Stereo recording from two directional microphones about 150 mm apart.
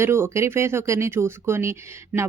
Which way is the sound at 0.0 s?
15° right (ahead or behind).